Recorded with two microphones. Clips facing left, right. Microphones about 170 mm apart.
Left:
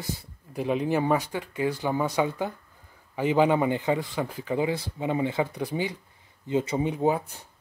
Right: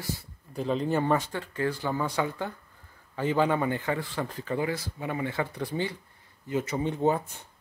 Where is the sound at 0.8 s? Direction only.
5° left (ahead or behind).